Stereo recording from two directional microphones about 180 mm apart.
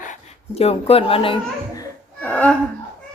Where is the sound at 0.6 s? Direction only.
35° left (ahead or behind).